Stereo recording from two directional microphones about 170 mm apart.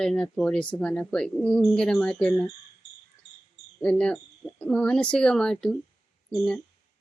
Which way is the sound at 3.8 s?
5° left (ahead or behind).